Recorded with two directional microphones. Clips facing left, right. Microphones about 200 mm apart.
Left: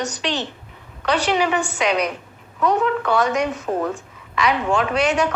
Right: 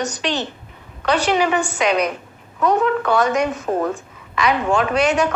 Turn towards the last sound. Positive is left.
turn(degrees=-45)  # may be behind; listen again after turning